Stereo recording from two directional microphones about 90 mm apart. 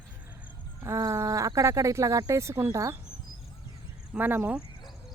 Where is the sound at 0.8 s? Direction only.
30° right (ahead or behind).